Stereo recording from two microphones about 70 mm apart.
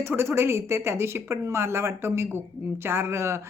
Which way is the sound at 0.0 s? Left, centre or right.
Right.